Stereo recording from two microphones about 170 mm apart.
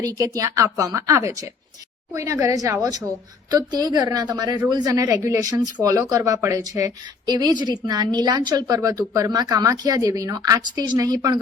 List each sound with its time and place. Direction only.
0.0 s speech: 20° right (ahead or behind)